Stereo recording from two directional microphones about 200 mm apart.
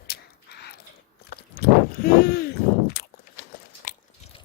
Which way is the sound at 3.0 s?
50° left (ahead or behind).